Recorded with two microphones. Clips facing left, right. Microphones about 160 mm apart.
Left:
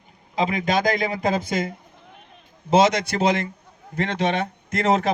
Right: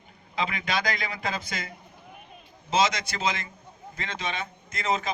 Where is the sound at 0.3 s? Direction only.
40° left (ahead or behind).